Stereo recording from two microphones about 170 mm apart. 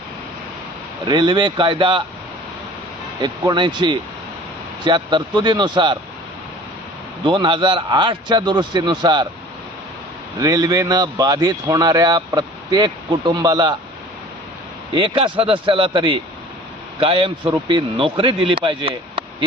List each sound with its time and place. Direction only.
1.0 s a man's voice: 25° right (ahead or behind)
3.2 s a man's voice: 25° right (ahead or behind)
7.3 s a man's voice: 30° right (ahead or behind)
10.4 s a man's voice: 20° right (ahead or behind)
14.9 s a man's voice: 30° right (ahead or behind)